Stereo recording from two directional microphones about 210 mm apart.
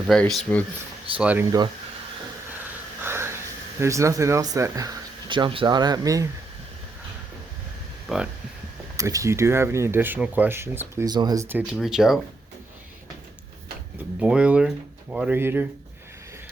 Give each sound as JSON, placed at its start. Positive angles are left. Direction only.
{"t": 0.1, "sound": "speech", "side_deg": 0}
{"t": 1.2, "sound": "speech", "side_deg": -5}
{"t": 3.0, "sound": "a sound", "side_deg": -10}
{"t": 3.8, "sound": "speech", "side_deg": -15}
{"t": 8.1, "sound": "speech", "side_deg": -5}
{"t": 9.0, "sound": "speech", "side_deg": -15}
{"t": 14.2, "sound": "speech", "side_deg": -5}